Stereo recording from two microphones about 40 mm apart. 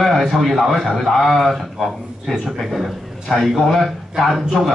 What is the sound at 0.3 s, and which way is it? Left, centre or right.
A man's voice, centre.